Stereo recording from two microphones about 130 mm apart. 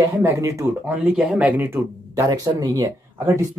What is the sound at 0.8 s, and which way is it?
Speech, 10° right (ahead or behind).